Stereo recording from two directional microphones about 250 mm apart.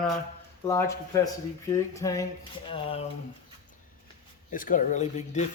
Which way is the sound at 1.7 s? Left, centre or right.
Centre.